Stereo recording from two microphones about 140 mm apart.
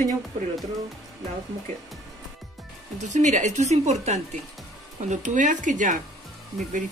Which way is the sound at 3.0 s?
60° right (ahead or behind).